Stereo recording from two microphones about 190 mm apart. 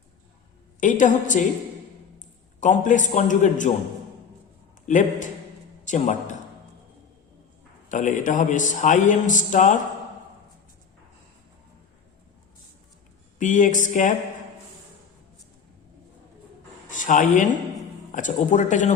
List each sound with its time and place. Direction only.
0.8 s a man's voice: 40° left (ahead or behind)
4.9 s a man's voice: 40° left (ahead or behind)
7.9 s a man's voice: 40° left (ahead or behind)
13.4 s speech: 40° left (ahead or behind)
16.9 s a man's voice: 45° left (ahead or behind)